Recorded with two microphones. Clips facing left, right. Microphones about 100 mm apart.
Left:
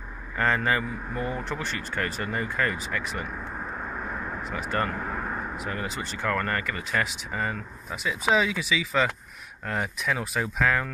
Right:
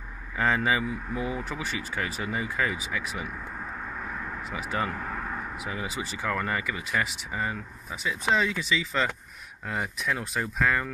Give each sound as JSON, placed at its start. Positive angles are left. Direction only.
{"t": 0.4, "sound": "speech", "side_deg": -5}
{"t": 4.4, "sound": "speech", "side_deg": -5}
{"t": 5.0, "sound": "a sound", "side_deg": 30}
{"t": 5.6, "sound": "speech", "side_deg": -5}